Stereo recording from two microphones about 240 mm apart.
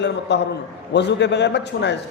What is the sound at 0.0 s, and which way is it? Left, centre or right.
A man's voice, left.